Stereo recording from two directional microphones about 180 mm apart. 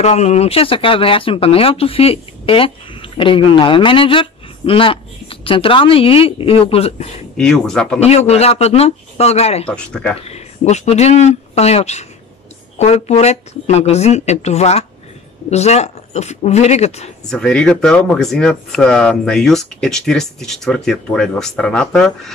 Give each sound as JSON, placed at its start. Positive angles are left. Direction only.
{"t": 0.0, "sound": "speech", "side_deg": 35}
{"t": 7.3, "sound": "speech", "side_deg": 5}
{"t": 8.0, "sound": "speech", "side_deg": 35}
{"t": 9.7, "sound": "speech", "side_deg": 5}
{"t": 10.3, "sound": "speech", "side_deg": 35}
{"t": 17.3, "sound": "speech", "side_deg": 5}